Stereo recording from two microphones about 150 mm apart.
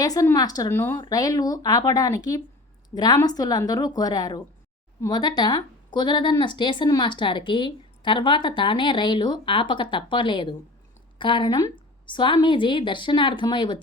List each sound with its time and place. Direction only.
0.0 s a woman's voice: 25° left (ahead or behind)
0.9 s a woman's voice: 25° left (ahead or behind)